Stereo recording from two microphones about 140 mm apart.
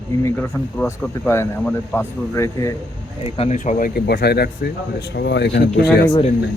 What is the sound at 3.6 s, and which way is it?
Speech, 80° left.